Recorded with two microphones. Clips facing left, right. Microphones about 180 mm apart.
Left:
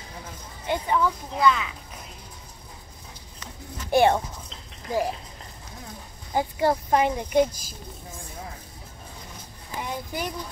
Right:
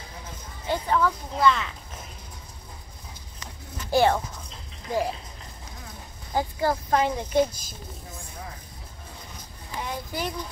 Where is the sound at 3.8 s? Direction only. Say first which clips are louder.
Left 2 dB; 20° left (ahead or behind).